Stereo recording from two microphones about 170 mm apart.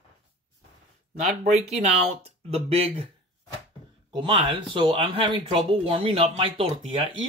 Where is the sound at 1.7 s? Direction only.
40° right (ahead or behind).